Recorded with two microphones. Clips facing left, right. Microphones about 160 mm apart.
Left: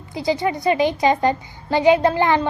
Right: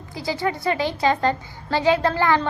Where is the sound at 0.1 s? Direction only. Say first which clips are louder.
Left 4 dB; 20° left (ahead or behind).